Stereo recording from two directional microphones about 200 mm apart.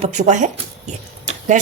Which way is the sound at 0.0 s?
35° right (ahead or behind).